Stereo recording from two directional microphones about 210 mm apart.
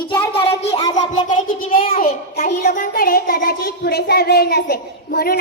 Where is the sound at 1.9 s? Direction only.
40° left (ahead or behind).